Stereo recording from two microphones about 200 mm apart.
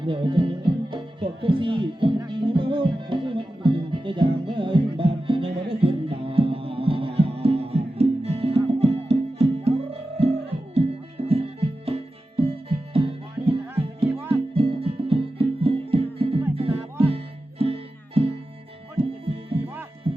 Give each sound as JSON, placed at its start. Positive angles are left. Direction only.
{"t": 0.0, "sound": "music", "side_deg": -25}
{"t": 20.1, "sound": "music", "side_deg": -25}